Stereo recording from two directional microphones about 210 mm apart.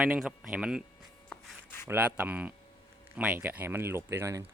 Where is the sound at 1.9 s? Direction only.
10° right (ahead or behind).